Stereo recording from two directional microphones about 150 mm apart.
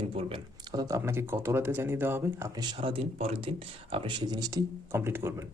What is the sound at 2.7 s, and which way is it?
Speech, 40° right (ahead or behind).